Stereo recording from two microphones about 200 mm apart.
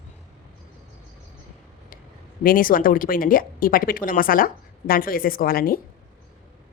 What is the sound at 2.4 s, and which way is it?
Speech, 45° left (ahead or behind).